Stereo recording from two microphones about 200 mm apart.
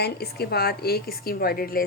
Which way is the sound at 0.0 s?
55° left (ahead or behind).